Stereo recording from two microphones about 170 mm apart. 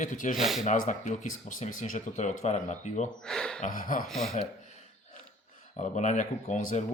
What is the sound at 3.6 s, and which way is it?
Speech, 45° left (ahead or behind).